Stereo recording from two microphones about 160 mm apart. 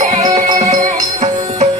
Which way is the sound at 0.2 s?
30° right (ahead or behind).